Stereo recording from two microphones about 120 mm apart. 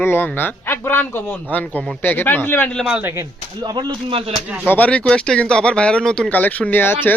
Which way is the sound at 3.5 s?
35° right (ahead or behind).